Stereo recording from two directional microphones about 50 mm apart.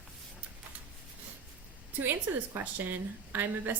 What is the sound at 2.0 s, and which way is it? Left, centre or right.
A woman's voice, right.